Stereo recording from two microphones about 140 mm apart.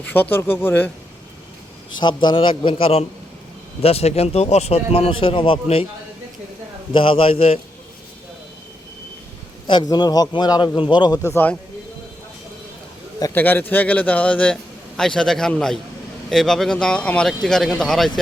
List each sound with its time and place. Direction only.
0.0 s a man's voice: 15° left (ahead or behind)
2.0 s a man's voice: 35° left (ahead or behind)
6.9 s a man's voice: 40° left (ahead or behind)
9.6 s a man's voice: 30° left (ahead or behind)
11.2 s a man's voice: 15° left (ahead or behind)
13.3 s a man's voice: 15° left (ahead or behind)